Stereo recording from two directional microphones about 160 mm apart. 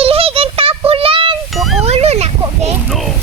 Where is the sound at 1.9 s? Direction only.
40° right (ahead or behind).